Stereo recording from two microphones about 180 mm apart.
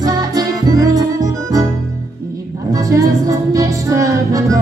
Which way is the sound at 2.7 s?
20° right (ahead or behind).